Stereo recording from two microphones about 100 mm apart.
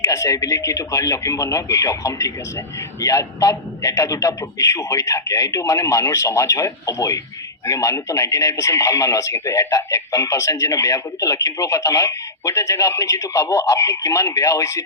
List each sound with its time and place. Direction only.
0.0 s speech: 30° left (ahead or behind)